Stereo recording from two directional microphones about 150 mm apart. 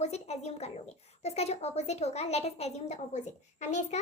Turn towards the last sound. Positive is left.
turn(degrees=50)  # may be behind; listen again after turning